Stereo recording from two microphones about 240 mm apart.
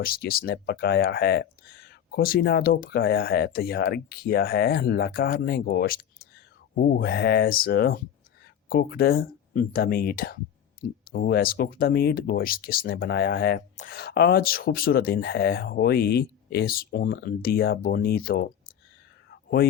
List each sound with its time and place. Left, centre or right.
0.0 s speech: left
19.3 s whispering: left